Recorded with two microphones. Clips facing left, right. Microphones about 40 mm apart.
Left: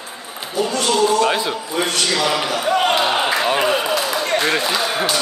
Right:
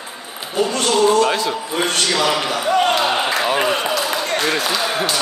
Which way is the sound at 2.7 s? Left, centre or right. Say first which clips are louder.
Right 1 dB; centre.